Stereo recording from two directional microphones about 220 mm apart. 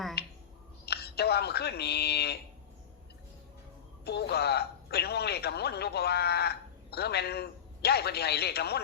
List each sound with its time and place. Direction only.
0.2 s a sound: 45° left (ahead or behind)
0.9 s speech: 45° left (ahead or behind)
4.0 s speech: 50° left (ahead or behind)